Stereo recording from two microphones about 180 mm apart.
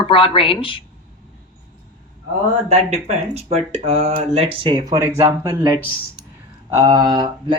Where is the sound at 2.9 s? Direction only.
35° right (ahead or behind).